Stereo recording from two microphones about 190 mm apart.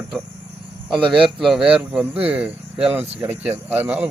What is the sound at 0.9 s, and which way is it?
Speech, 25° right (ahead or behind).